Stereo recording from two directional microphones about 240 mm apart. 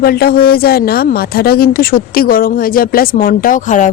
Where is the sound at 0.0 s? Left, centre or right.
Left.